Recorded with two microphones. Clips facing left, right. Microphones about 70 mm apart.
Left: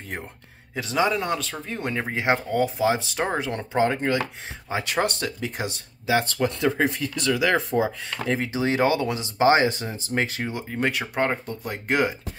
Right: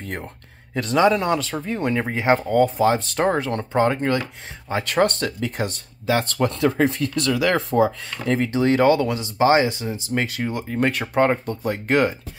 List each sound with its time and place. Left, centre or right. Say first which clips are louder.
0.7 s speech: right 5 dB; centre; by 10.4 s left
10.7 s speech: right 4 dB; centre